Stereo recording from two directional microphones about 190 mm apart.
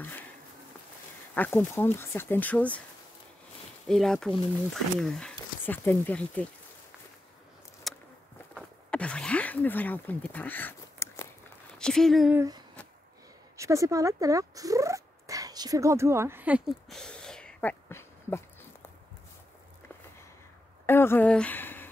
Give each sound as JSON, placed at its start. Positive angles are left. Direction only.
{"t": 0.0, "sound": "insect", "side_deg": 10}
{"t": 1.3, "sound": "speech", "side_deg": 10}
{"t": 3.8, "sound": "speech", "side_deg": 0}
{"t": 7.9, "sound": "a sound", "side_deg": 0}
{"t": 11.8, "sound": "speech", "side_deg": 0}
{"t": 12.4, "sound": "speech", "side_deg": -20}
{"t": 20.8, "sound": "speech", "side_deg": 10}